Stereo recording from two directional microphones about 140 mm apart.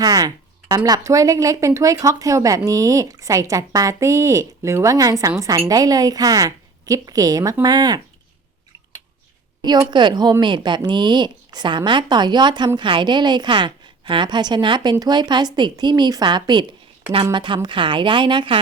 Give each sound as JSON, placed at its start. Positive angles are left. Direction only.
{"t": 0.0, "sound": "a sound", "side_deg": -25}
{"t": 0.9, "sound": "speech", "side_deg": -25}
{"t": 9.6, "sound": "speech", "side_deg": -30}